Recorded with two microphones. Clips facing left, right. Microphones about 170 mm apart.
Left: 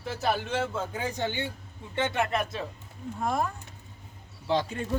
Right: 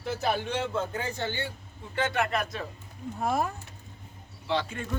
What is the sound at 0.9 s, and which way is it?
Speech, 15° left (ahead or behind).